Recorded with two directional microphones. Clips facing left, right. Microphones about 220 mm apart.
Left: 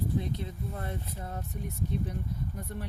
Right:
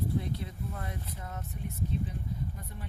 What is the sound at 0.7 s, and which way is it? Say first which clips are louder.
Speech: left 3 dB; 30° left (ahead or behind).